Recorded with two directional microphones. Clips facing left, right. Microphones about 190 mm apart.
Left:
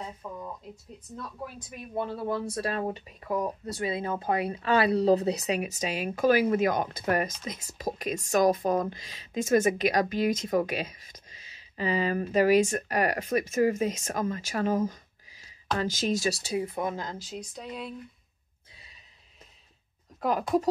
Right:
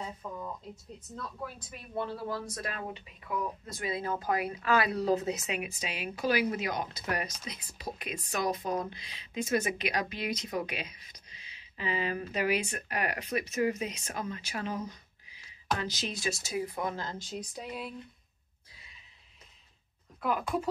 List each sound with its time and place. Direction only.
0.2 s a sound: 10° left (ahead or behind)
2.0 s speech: 20° left (ahead or behind)
2.5 s speech: 35° left (ahead or behind)
3.7 s speech: 25° left (ahead or behind)
17.2 s a sound: centre (ahead or behind)
20.2 s speech: 40° left (ahead or behind)